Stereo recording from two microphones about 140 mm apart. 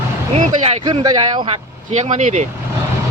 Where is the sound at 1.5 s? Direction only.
55° right (ahead or behind).